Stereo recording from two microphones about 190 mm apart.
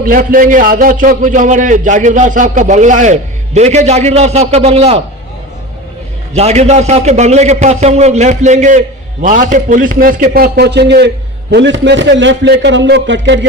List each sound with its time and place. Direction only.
0.0 s a man's voice: 50° right (ahead or behind); by 5.0 s 30° right (ahead or behind)
6.3 s a man's voice: 35° right (ahead or behind); by 13.4 s 70° right (ahead or behind)